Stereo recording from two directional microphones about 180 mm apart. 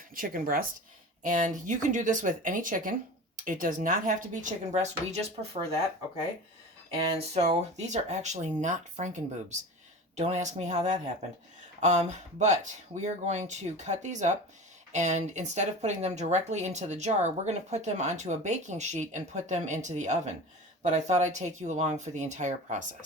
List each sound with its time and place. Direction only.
0.1 s a woman's voice: 50° right (ahead or behind)
7.3 s speech: 40° right (ahead or behind)